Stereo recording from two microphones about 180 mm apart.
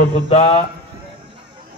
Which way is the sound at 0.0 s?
40° left (ahead or behind).